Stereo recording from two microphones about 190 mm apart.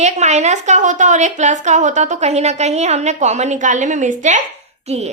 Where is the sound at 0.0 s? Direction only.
35° right (ahead or behind).